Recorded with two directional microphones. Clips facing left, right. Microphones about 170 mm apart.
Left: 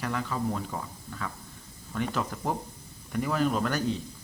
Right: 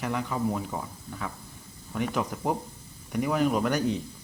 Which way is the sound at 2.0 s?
15° right (ahead or behind).